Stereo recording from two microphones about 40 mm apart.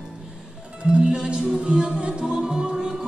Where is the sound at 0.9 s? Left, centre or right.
Right.